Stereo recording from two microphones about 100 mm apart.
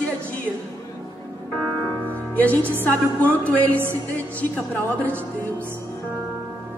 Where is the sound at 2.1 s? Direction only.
15° left (ahead or behind).